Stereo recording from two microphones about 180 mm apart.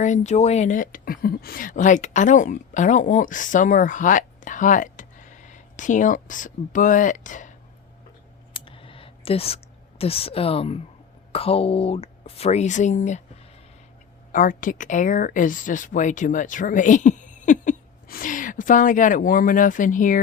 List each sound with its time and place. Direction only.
0.0 s a woman's voice: 40° left (ahead or behind)
8.5 s clicking: 30° left (ahead or behind)
10.0 s speech: 35° left (ahead or behind)
14.3 s a woman's voice: 50° left (ahead or behind)